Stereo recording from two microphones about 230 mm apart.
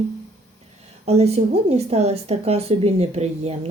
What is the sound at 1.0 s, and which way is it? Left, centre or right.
A woman's voice, right.